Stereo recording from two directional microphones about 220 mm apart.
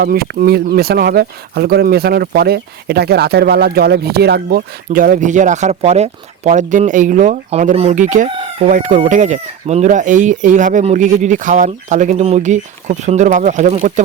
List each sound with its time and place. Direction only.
0.0 s speech: 45° right (ahead or behind)